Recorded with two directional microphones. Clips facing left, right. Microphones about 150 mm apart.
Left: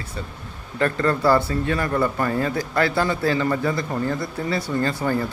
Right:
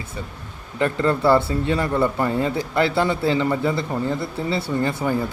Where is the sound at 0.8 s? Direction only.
20° right (ahead or behind).